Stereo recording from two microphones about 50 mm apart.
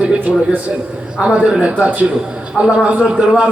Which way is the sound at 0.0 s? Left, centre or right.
Right.